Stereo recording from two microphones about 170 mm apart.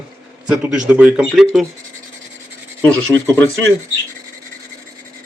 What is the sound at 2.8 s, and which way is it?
Speech, 5° left (ahead or behind).